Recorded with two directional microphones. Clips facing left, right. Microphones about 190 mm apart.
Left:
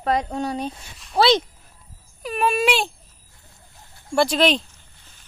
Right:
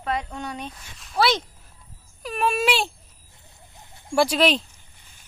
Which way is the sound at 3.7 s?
20° right (ahead or behind).